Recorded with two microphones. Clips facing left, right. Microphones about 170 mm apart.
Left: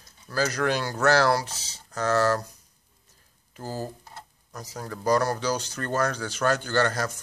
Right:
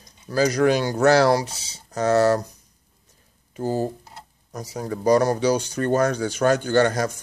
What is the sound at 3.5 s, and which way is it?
Speech, 20° right (ahead or behind).